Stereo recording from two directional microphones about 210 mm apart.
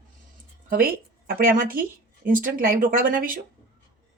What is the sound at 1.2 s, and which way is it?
A woman's voice, 45° right (ahead or behind).